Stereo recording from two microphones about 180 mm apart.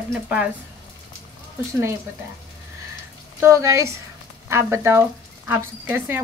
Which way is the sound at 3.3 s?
15° right (ahead or behind).